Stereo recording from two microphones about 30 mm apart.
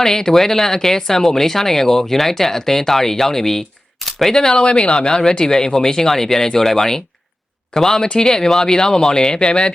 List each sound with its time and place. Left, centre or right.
0.0 s speech: centre
4.5 s speech: left